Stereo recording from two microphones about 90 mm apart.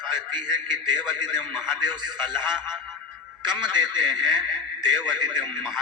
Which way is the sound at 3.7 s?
55° right (ahead or behind).